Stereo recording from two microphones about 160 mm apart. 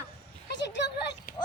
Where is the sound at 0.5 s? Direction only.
90° left.